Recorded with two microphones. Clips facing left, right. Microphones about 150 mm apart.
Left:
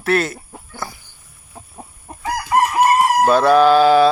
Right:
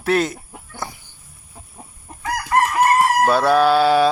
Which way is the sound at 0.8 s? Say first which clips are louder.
Left 1 dB; 20° right (ahead or behind).